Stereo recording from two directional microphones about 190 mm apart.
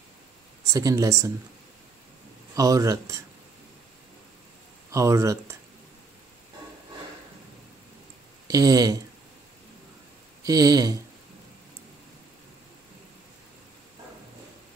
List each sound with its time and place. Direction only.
0.7 s speech: 15° right (ahead or behind)
2.5 s speech: 15° right (ahead or behind)
4.9 s speech: 15° right (ahead or behind)
8.5 s speech: 20° right (ahead or behind)
10.4 s speech: 20° right (ahead or behind)